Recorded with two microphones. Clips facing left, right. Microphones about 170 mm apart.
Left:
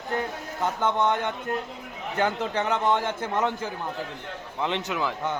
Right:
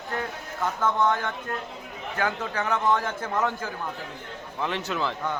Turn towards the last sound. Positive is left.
turn(degrees=15)  # may be behind; listen again after turning